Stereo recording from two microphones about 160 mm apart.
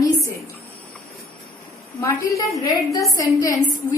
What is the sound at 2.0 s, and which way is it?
A woman's voice, 20° left (ahead or behind).